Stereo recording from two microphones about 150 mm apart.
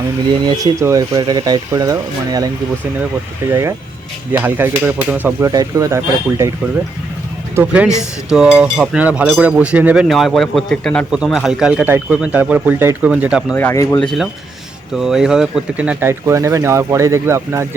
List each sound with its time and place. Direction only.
0.4 s speech: 20° right (ahead or behind)
3.5 s speech: 20° right (ahead or behind)
5.5 s speech: 25° right (ahead or behind)
7.5 s speech: 10° right (ahead or behind)
13.5 s speech: 15° left (ahead or behind)
14.9 s speech: 5° right (ahead or behind)